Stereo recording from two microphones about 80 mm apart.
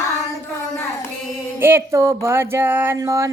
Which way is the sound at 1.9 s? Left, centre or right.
Right.